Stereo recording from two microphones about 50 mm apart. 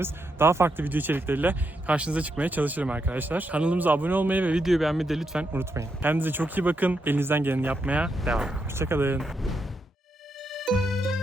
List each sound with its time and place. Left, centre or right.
0.0 s speech: right
2.0 s speech: right
4.6 s speech: centre
6.0 s speech: right
8.2 s speech: centre
8.7 s speech: right
9.1 s speech: centre
10.5 s music: centre